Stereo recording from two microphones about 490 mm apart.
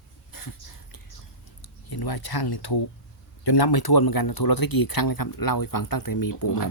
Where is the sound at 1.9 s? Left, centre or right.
Left.